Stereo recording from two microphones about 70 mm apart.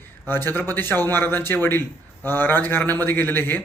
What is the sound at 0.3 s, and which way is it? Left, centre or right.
Speech, left.